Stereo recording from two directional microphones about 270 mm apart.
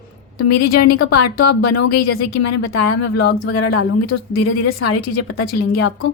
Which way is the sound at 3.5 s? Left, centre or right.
Left.